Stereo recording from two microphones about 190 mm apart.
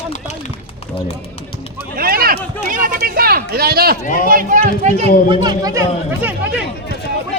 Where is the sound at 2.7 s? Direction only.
45° right (ahead or behind).